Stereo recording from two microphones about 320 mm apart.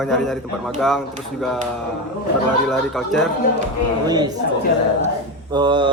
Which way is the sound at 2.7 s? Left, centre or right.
Centre.